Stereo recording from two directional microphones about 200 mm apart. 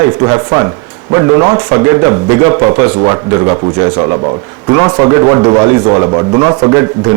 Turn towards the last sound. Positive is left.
turn(degrees=-15)  # may be behind; listen again after turning